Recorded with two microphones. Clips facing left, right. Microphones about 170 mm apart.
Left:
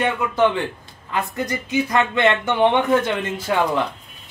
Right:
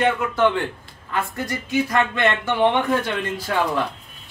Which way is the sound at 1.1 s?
20° left (ahead or behind).